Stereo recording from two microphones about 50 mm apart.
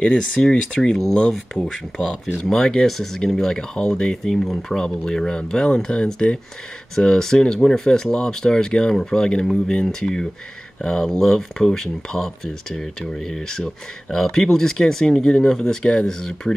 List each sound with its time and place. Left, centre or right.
0.0 s speech: centre